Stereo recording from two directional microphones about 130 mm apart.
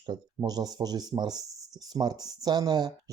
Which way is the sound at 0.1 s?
30° right (ahead or behind).